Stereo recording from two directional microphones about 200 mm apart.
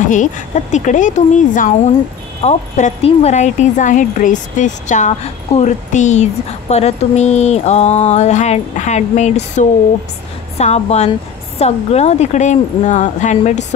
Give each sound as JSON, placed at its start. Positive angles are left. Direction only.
{"t": 0.1, "sound": "speech", "side_deg": 40}